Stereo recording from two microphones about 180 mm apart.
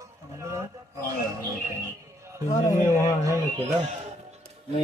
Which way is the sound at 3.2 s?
15° right (ahead or behind).